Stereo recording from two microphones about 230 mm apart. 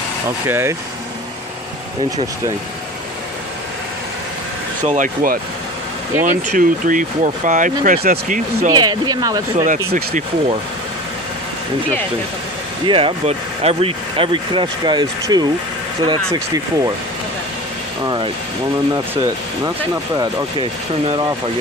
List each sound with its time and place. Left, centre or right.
0.5 s speech: centre
4.8 s speech: right
8.7 s speech: centre
9.8 s speech: right
12.8 s speech: right
18.0 s speech: right